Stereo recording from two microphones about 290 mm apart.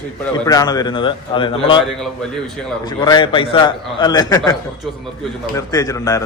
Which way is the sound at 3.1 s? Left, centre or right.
Centre.